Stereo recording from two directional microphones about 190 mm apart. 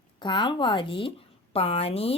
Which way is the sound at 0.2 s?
25° left (ahead or behind).